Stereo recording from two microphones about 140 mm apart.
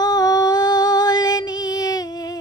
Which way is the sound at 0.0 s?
30° left (ahead or behind).